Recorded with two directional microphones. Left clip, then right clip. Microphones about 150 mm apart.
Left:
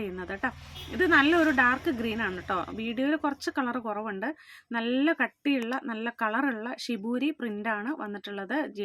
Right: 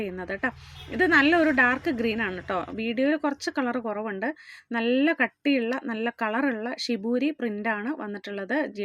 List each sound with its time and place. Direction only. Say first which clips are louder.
0.0 s a woman's voice: right 3 dB; 20° right (ahead or behind)